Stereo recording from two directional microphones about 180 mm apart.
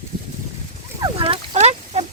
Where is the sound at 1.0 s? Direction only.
30° right (ahead or behind).